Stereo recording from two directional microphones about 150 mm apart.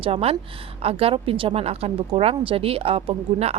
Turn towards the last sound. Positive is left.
turn(degrees=-40)  # may be behind; listen again after turning